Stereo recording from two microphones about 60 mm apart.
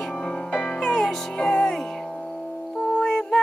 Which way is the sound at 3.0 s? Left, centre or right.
Centre.